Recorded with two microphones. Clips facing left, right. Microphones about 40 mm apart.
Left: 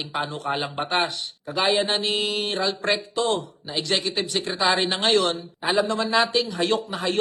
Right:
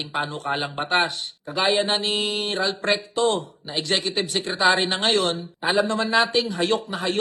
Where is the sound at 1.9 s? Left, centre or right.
Right.